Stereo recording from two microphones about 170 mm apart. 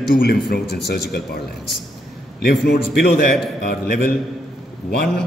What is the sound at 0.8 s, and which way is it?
Speech, 70° left (ahead or behind).